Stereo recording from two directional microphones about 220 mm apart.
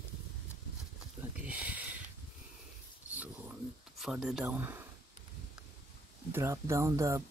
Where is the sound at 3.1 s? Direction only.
5° right (ahead or behind).